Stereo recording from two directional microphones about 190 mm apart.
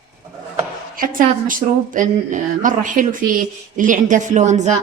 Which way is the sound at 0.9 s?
45° right (ahead or behind).